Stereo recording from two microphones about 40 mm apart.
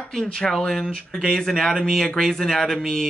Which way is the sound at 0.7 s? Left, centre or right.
Centre.